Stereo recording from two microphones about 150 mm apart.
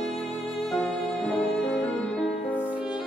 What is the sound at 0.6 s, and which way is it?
Music, 5° left (ahead or behind).